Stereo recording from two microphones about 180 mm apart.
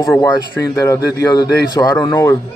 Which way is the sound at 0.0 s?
20° left (ahead or behind).